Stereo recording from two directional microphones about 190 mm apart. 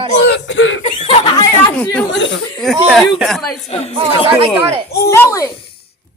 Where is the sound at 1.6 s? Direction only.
5° left (ahead or behind).